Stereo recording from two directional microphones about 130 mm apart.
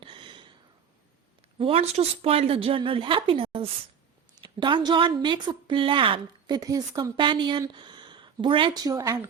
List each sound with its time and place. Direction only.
0.0 s a sound: 40° right (ahead or behind)
1.5 s a woman's voice: 45° right (ahead or behind)
6.6 s a woman's voice: 30° right (ahead or behind)